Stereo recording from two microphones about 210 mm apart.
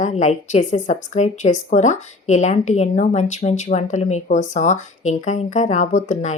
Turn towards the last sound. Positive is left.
turn(degrees=35)  # may be behind; listen again after turning